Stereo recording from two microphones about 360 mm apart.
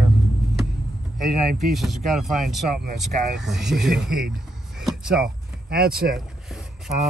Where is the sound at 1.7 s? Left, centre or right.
Centre.